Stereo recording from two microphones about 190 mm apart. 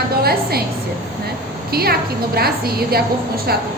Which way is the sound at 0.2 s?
55° right (ahead or behind).